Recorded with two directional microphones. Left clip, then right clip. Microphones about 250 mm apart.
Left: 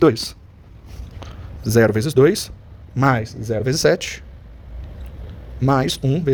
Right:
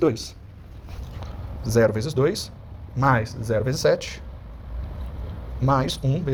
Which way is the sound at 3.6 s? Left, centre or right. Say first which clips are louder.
Left 5 dB; left.